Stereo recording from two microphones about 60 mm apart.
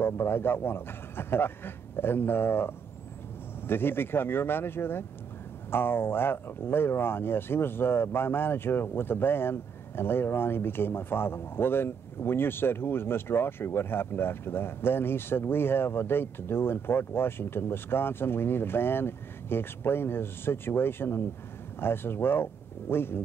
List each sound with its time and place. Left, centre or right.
0.0 s speech: left